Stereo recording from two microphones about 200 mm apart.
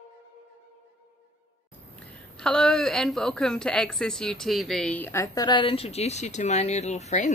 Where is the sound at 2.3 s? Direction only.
5° left (ahead or behind).